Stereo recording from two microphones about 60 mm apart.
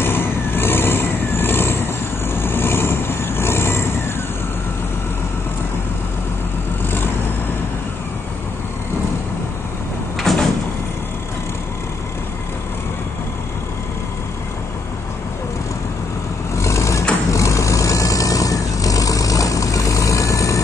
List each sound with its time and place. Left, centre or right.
0.0 s vehicle: left
10.3 s sliding door: centre
16.5 s vehicle: left